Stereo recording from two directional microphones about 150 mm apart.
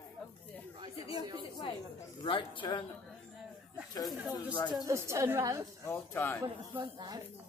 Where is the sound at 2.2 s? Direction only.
35° left (ahead or behind).